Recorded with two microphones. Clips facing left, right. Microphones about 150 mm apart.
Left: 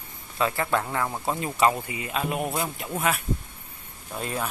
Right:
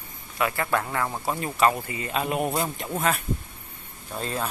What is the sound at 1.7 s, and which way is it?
Speech, 10° left (ahead or behind).